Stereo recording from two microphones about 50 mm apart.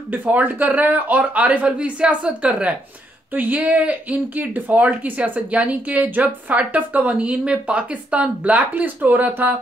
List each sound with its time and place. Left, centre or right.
0.1 s speech: right